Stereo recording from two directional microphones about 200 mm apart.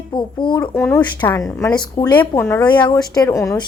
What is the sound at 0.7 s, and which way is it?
Speech, 10° left (ahead or behind).